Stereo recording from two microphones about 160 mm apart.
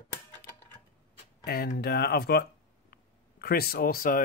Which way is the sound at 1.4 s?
75° left (ahead or behind).